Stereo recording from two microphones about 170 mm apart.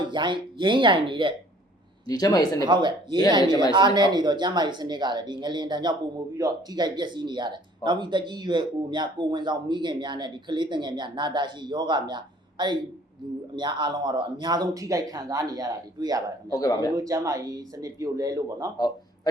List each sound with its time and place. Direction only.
0.0 s speech: 25° right (ahead or behind)
2.0 s speech: 20° left (ahead or behind)
2.6 s speech: 25° right (ahead or behind)
16.5 s speech: 20° left (ahead or behind)
17.0 s speech: 20° right (ahead or behind)